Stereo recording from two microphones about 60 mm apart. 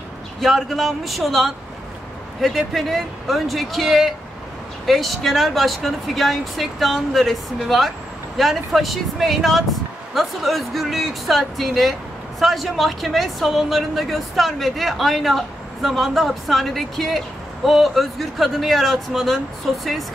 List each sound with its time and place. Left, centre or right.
0.4 s a woman's voice: centre